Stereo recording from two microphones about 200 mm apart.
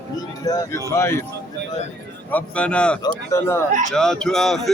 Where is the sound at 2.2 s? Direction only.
5° left (ahead or behind).